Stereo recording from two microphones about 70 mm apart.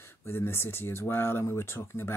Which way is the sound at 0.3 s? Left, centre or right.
Left.